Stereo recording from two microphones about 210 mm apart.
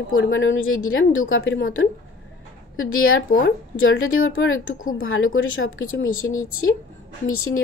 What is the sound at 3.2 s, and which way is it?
Speech, 40° left (ahead or behind).